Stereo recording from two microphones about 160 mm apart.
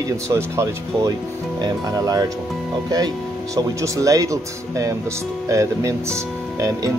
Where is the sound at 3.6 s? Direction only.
20° right (ahead or behind).